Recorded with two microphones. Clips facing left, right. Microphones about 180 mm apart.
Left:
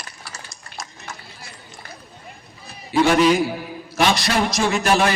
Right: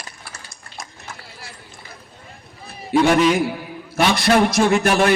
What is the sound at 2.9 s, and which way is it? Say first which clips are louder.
Speech: right 2 dB; 55° right (ahead or behind).